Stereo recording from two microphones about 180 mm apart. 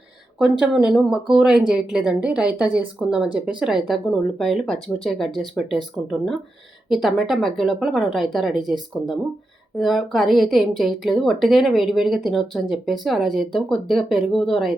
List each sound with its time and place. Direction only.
0.3 s a woman's voice: centre (ahead or behind)